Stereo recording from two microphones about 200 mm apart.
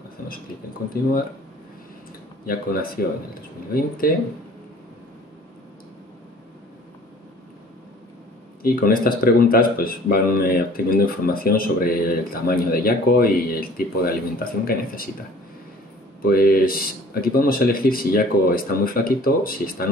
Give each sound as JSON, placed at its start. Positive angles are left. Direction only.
{"t": 2.4, "sound": "speech", "side_deg": 45}
{"t": 8.6, "sound": "speech", "side_deg": 45}
{"t": 16.2, "sound": "speech", "side_deg": 50}